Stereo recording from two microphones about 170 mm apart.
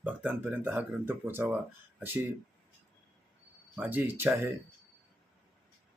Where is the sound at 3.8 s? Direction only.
10° right (ahead or behind).